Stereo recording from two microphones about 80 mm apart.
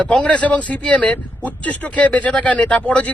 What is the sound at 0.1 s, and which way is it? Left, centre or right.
Speech, centre.